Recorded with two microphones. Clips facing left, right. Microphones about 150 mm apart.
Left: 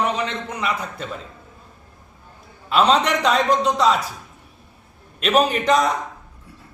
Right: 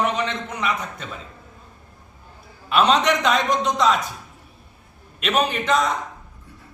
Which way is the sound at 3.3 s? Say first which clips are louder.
Left 2 dB; 30° left (ahead or behind).